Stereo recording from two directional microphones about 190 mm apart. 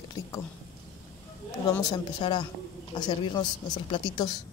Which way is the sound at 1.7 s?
15° left (ahead or behind).